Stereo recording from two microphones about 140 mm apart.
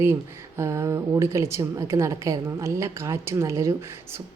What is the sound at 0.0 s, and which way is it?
Speech, 20° right (ahead or behind).